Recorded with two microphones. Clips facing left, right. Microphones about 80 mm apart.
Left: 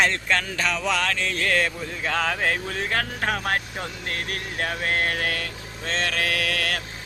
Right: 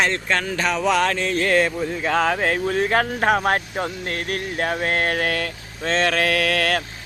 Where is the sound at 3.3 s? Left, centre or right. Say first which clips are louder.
Right 6 dB; right.